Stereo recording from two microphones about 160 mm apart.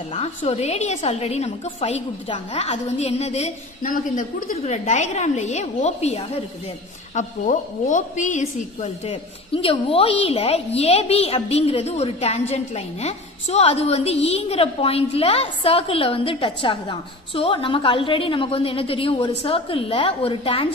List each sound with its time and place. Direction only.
0.4 s a woman's voice: 40° left (ahead or behind)
7.2 s a woman's voice: 55° left (ahead or behind); by 20.6 s 35° left (ahead or behind)